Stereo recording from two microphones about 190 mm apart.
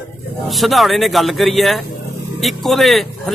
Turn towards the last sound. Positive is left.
turn(degrees=0)  # may be behind; listen again after turning